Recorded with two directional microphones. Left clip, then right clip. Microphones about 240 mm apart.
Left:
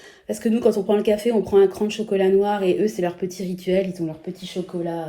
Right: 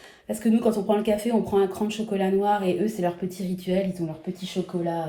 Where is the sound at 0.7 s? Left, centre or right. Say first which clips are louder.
Left 3 dB; left.